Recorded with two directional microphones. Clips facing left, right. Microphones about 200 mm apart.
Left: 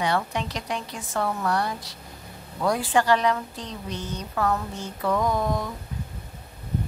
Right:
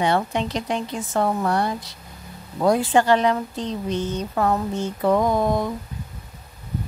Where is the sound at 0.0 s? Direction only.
25° right (ahead or behind).